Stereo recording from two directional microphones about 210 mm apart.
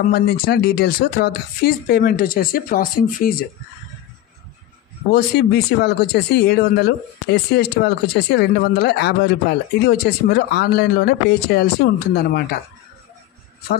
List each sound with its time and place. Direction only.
0.1 s speech: 50° left (ahead or behind)
5.1 s speech: 50° left (ahead or behind)